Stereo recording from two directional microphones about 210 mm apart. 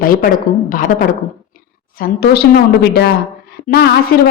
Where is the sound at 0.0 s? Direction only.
45° left (ahead or behind).